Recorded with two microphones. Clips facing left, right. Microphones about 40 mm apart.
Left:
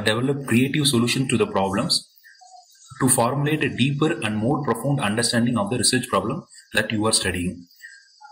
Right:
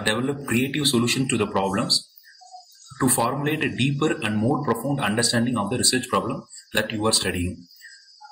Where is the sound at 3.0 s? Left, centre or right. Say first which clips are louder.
Left 2 dB; centre.